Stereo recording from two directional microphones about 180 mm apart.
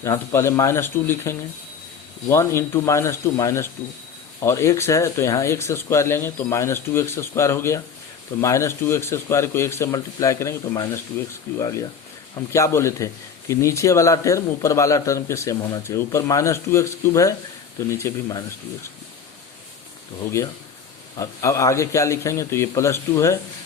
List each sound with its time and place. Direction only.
0.0 s speech: 15° left (ahead or behind)
21.2 s speech: 15° left (ahead or behind)